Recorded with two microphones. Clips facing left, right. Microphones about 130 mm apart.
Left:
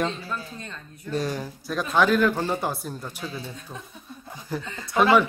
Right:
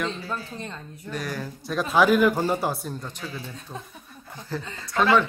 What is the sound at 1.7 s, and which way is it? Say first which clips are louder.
Speech: right 2 dB; centre (ahead or behind).